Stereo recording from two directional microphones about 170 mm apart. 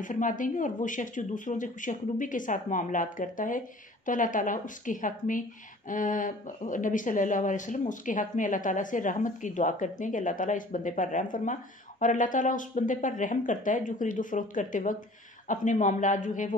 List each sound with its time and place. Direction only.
0.0 s speech: 50° left (ahead or behind)